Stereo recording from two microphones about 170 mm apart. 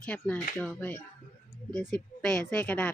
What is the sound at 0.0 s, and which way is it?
Speech, 5° left (ahead or behind).